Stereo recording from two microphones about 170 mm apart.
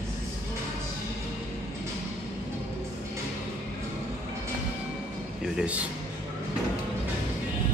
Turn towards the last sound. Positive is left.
turn(degrees=-10)  # may be behind; listen again after turning